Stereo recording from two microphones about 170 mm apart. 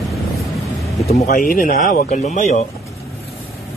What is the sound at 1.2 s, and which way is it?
Speech, 55° left (ahead or behind).